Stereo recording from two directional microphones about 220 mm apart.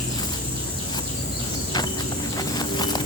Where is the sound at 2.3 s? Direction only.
20° left (ahead or behind).